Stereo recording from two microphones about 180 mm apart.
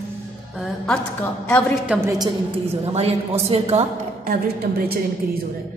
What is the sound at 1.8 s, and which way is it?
Speech, 10° right (ahead or behind).